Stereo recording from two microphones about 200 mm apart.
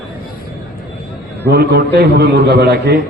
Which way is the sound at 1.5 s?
55° right (ahead or behind).